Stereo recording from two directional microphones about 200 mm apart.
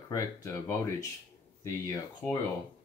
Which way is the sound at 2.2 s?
5° left (ahead or behind).